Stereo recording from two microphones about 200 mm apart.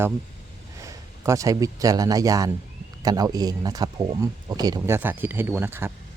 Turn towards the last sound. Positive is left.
turn(degrees=-10)  # may be behind; listen again after turning